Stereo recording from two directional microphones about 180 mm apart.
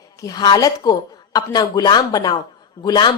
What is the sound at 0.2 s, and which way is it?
Speech, 20° left (ahead or behind).